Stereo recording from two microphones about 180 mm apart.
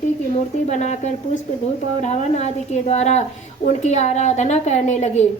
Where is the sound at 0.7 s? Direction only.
40° left (ahead or behind).